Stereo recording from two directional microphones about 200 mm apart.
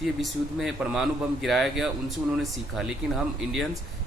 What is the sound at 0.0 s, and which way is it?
A man's voice, centre (ahead or behind).